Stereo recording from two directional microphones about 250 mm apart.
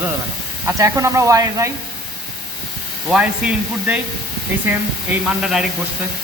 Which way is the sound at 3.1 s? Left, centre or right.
Centre.